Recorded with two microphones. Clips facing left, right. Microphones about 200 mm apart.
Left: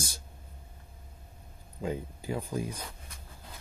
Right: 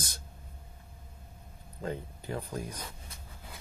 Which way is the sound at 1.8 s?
10° left (ahead or behind).